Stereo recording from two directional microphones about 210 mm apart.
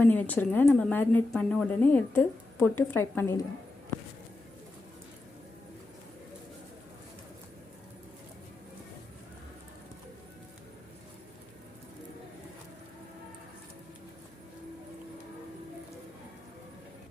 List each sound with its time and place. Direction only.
0.0 s a woman's voice: 10° left (ahead or behind)